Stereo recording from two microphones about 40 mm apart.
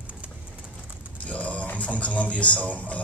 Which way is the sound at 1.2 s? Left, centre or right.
Left.